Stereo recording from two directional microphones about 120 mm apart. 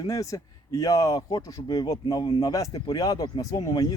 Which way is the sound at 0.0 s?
30° left (ahead or behind).